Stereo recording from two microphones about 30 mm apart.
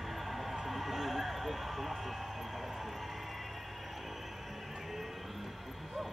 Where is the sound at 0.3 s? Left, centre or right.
Centre.